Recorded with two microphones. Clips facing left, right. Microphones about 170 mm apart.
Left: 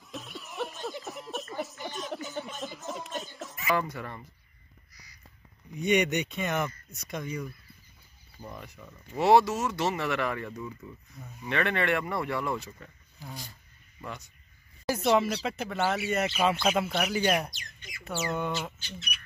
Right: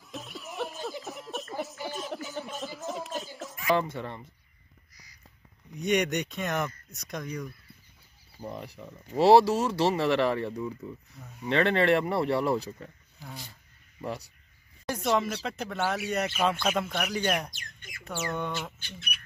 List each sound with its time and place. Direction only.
0.1 s a sound: centre (ahead or behind)
3.7 s speech: 25° right (ahead or behind)
5.8 s speech: centre (ahead or behind)
8.4 s speech: 30° right (ahead or behind)
14.0 s speech: 35° right (ahead or behind)
14.9 s a sound: 5° left (ahead or behind)
15.2 s speech: 5° left (ahead or behind)
17.6 s speech: 50° right (ahead or behind)
18.2 s speech: 5° left (ahead or behind)
18.8 s speech: 55° right (ahead or behind)